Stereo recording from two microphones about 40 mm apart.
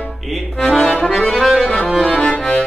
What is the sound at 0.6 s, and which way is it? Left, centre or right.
Accordion, centre.